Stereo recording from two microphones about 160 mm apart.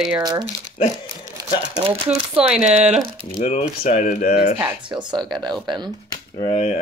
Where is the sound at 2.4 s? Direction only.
5° right (ahead or behind).